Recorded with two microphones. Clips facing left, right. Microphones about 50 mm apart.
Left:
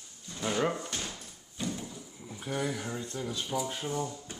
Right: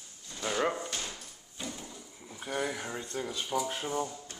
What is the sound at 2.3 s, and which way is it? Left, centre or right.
Speech, centre.